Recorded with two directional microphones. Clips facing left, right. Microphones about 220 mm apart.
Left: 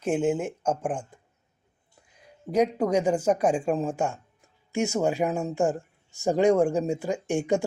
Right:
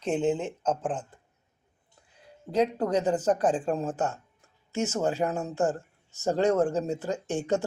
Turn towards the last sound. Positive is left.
turn(degrees=15)  # may be behind; listen again after turning